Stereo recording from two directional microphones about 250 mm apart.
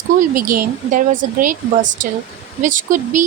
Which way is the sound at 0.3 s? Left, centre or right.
Right.